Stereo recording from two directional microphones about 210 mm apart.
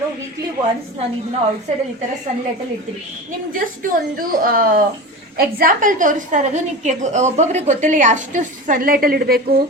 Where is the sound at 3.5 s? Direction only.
40° right (ahead or behind).